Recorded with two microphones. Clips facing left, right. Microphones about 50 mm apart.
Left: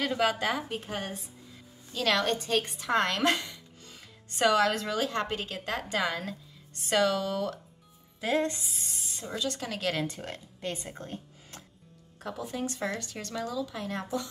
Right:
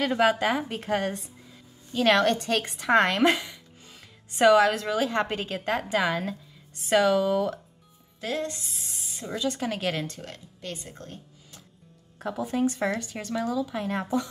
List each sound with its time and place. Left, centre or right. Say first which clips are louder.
0.1 s a woman's voice: right 5 dB; centre
0.7 s a woman's voice: right 7 dB; right
2.2 s a woman's voice: right 4 dB; right
2.9 s a woman's voice: right 6 dB; right
3.3 s music: right 2 dB; centre
4.3 s a woman's voice: right 6 dB; right
8.4 s speech: left 2 dB; left
8.6 s speech: even; centre
9.4 s a woman's voice: right 4 dB; right
10.0 s speech: left 2 dB; left
12.2 s a woman's voice: right 8 dB; right